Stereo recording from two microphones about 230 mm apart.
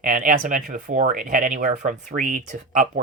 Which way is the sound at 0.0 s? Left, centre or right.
Right.